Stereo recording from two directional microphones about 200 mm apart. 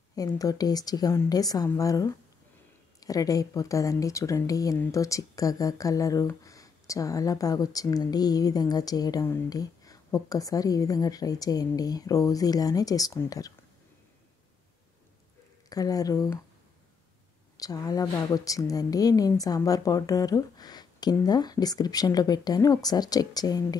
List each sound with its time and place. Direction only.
0.1 s a woman's voice: 20° left (ahead or behind)
15.7 s speech: 20° left (ahead or behind)
17.6 s a woman's voice: 20° left (ahead or behind)